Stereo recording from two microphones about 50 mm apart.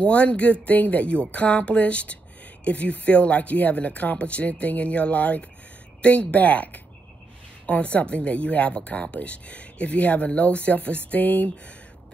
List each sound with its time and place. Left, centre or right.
0.0 s speech: left